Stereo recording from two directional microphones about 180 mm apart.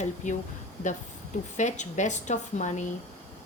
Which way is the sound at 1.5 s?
40° left (ahead or behind).